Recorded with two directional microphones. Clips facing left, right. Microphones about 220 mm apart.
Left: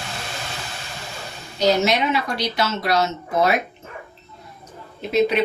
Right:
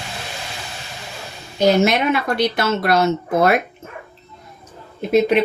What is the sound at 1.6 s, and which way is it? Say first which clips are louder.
Speech: right 3 dB; 55° right (ahead or behind).